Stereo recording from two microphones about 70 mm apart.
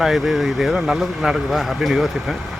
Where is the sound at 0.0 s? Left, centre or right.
Centre.